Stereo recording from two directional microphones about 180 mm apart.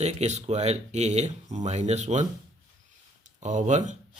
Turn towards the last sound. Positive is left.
turn(degrees=-40)  # may be behind; listen again after turning